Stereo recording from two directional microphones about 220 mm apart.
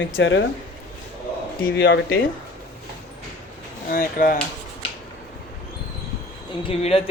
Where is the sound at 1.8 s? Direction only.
50° left (ahead or behind).